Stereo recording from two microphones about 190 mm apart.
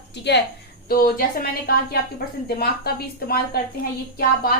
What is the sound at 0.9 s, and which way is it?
A woman's voice, 50° left (ahead or behind).